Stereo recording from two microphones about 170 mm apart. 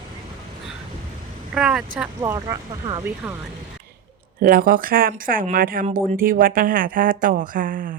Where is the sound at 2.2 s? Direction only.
20° right (ahead or behind).